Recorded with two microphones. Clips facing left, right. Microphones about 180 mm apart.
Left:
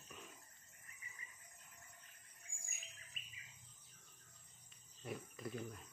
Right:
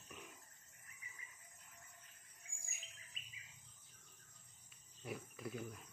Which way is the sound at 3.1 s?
50° left (ahead or behind).